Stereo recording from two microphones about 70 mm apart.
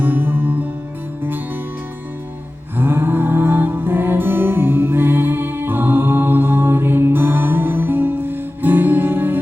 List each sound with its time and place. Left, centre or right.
0.0 s music: right
2.7 s music: right